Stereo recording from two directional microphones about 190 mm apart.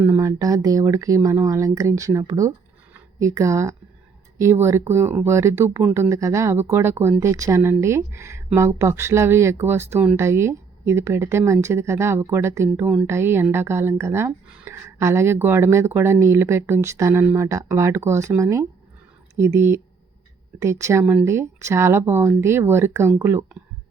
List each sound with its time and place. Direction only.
0.0 s a woman's voice: 15° right (ahead or behind)